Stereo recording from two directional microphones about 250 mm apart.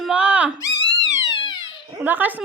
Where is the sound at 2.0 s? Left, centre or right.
Centre.